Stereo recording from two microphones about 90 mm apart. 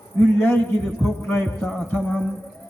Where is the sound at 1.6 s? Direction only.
5° left (ahead or behind).